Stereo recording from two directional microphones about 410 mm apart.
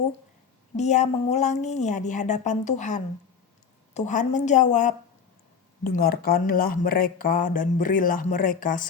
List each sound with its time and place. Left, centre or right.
0.8 s a woman's voice: centre
6.0 s speech: left